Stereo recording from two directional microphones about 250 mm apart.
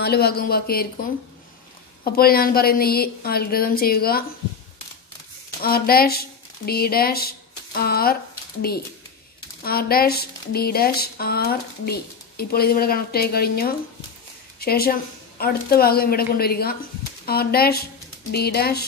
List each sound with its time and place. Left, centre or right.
0.0 s speech: left
2.0 s speech: left
5.6 s speech: left
9.6 s speech: left